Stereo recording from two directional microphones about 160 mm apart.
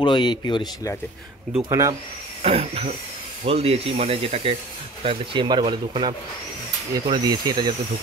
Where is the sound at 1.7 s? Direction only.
20° right (ahead or behind).